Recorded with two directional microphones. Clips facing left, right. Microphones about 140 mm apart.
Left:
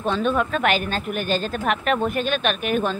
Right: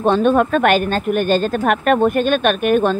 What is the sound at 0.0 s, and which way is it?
Speech, 55° right (ahead or behind).